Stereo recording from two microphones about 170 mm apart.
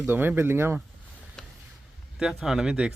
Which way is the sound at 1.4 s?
Centre (ahead or behind).